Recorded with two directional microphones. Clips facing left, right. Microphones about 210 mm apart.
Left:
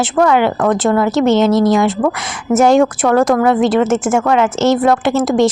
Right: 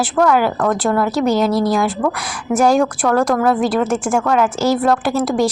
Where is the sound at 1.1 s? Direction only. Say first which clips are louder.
Left 4 dB; 25° left (ahead or behind).